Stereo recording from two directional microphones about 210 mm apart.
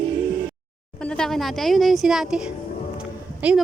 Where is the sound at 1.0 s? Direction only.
5° left (ahead or behind).